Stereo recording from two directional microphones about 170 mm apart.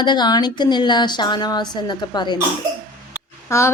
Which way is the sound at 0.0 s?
25° left (ahead or behind).